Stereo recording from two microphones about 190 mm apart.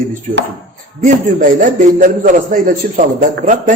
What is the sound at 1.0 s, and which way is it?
A man's voice, 45° right (ahead or behind).